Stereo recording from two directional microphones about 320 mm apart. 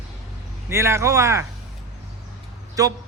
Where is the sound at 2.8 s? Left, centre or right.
Centre.